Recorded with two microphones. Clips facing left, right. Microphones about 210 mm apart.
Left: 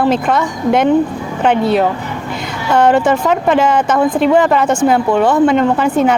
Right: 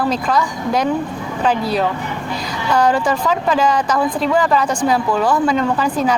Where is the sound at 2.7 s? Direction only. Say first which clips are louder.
Left 5 dB; 25° left (ahead or behind).